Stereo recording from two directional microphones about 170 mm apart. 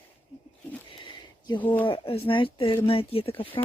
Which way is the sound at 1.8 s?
35° left (ahead or behind).